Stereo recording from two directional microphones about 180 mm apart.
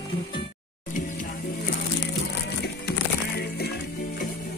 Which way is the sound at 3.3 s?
65° left (ahead or behind).